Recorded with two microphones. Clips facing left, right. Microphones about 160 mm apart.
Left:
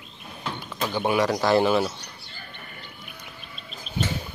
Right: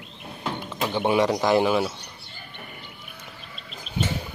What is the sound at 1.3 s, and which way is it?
Speech, 15° right (ahead or behind).